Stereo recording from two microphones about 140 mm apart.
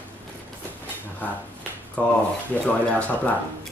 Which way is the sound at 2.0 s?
10° left (ahead or behind).